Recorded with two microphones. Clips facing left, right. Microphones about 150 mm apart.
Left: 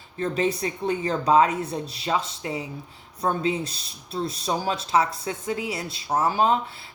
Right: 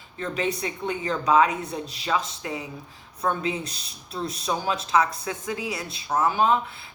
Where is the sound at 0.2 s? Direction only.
35° left (ahead or behind).